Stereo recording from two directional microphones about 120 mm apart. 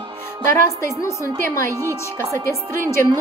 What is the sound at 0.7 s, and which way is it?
A woman's voice, 25° left (ahead or behind).